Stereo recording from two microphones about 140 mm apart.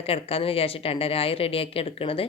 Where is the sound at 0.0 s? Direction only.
45° left (ahead or behind).